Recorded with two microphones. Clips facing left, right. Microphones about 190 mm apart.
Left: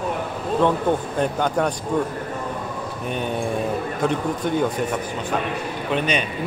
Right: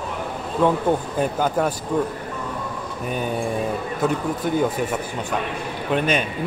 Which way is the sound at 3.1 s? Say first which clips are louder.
Right 1 dB; 5° right (ahead or behind).